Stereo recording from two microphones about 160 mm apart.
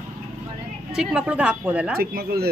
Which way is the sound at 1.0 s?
5° right (ahead or behind).